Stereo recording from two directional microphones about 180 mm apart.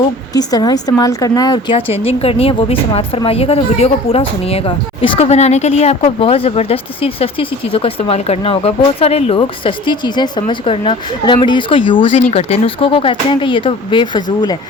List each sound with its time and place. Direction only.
0.3 s a woman's voice: 20° left (ahead or behind)